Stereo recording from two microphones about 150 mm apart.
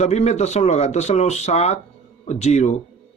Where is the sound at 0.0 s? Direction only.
45° left (ahead or behind).